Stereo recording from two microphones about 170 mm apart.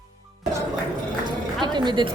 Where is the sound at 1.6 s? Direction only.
25° right (ahead or behind).